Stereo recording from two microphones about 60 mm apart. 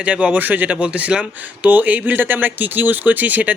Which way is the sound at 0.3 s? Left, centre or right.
Right.